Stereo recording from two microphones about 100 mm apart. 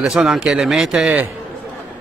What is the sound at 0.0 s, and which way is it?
A man's voice, 5° right (ahead or behind).